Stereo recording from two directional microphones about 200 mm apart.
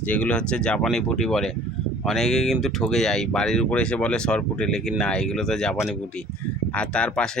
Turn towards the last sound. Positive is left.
turn(degrees=5)  # may be behind; listen again after turning